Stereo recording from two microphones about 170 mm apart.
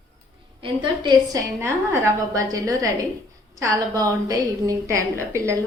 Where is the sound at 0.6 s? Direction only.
25° right (ahead or behind).